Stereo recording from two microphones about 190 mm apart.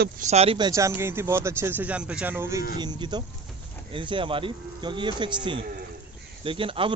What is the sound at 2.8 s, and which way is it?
A man's voice, 25° right (ahead or behind).